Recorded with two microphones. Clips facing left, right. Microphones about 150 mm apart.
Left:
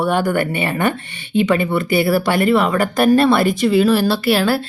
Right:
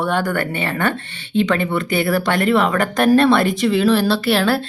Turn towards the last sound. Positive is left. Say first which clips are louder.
# left 1 dB
turn(degrees=5)  # may be behind; listen again after turning